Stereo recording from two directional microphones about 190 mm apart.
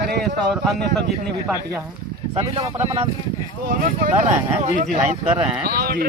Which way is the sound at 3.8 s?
40° right (ahead or behind).